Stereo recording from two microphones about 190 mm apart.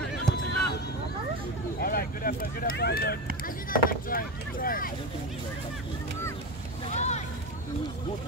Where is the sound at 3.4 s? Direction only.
45° left (ahead or behind).